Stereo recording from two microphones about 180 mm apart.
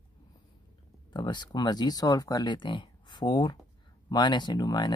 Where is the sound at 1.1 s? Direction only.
25° left (ahead or behind).